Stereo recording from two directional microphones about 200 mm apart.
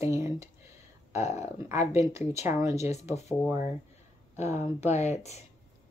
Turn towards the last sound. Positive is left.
turn(degrees=35)  # may be behind; listen again after turning